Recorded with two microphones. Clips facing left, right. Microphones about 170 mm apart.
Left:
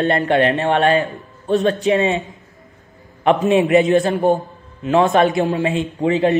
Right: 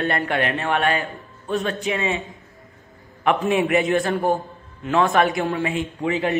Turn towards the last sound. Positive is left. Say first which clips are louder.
# left 6 dB
turn(degrees=30)  # may be behind; listen again after turning